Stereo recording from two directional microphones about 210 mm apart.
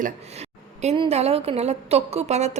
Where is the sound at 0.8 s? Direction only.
25° right (ahead or behind).